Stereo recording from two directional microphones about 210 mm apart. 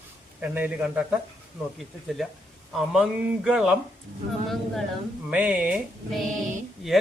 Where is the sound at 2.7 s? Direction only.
Centre (ahead or behind).